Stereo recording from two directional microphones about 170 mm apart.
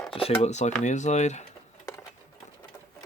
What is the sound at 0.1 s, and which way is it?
Speech, 35° left (ahead or behind).